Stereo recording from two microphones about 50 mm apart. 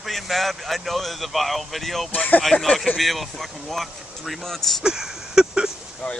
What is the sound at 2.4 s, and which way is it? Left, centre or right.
Speech, centre.